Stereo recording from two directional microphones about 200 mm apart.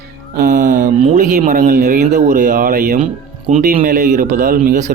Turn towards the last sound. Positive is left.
turn(degrees=-45)  # may be behind; listen again after turning